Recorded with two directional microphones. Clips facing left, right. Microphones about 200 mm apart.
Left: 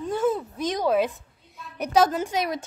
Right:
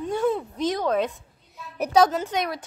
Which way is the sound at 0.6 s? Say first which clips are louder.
Left 1 dB; 10° left (ahead or behind).